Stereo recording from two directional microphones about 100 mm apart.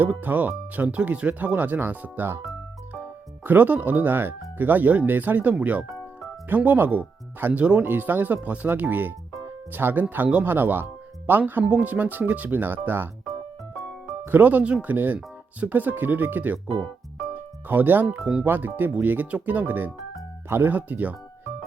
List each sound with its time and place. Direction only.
0.0 s speech: 20° right (ahead or behind)
14.3 s speech: 15° right (ahead or behind)